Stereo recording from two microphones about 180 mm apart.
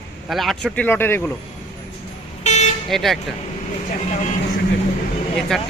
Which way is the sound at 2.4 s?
40° left (ahead or behind).